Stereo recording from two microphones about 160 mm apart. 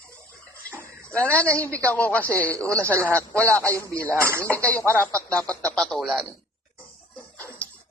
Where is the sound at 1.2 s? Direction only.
10° left (ahead or behind).